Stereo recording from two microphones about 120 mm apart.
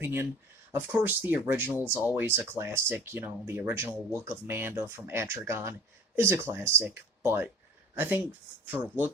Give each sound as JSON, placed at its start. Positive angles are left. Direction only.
{"t": 0.0, "sound": "speech", "side_deg": -20}